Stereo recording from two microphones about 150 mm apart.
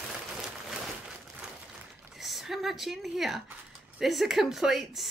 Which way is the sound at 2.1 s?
Centre (ahead or behind).